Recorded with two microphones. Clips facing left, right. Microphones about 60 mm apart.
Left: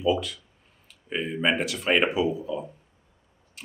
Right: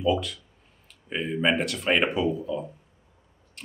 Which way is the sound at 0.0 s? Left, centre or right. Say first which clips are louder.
Even; centre.